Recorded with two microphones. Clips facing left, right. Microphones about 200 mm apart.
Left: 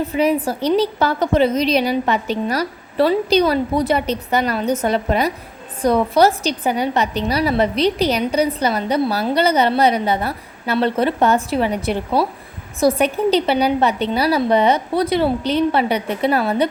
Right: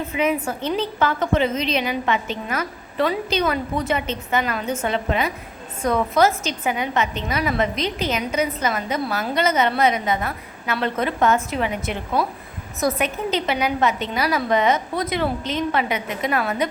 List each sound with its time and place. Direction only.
0.1 s a woman's voice: 35° left (ahead or behind)